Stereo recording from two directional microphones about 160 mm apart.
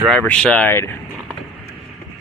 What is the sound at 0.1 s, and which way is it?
Speech, 5° left (ahead or behind).